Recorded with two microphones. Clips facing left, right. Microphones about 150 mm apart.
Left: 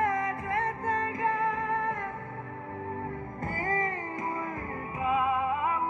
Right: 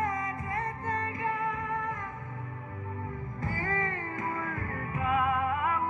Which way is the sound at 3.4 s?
40° left (ahead or behind).